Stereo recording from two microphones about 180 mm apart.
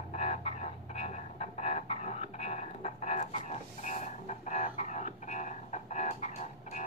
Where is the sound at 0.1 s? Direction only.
35° left (ahead or behind).